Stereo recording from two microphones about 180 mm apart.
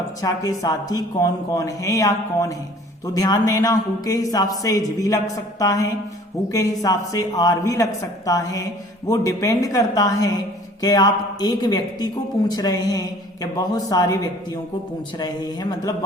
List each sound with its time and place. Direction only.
0.2 s speech: 20° left (ahead or behind)